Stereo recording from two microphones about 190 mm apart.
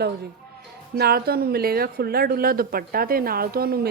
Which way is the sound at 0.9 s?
55° right (ahead or behind).